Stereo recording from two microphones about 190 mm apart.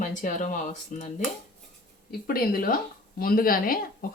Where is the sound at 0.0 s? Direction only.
40° left (ahead or behind).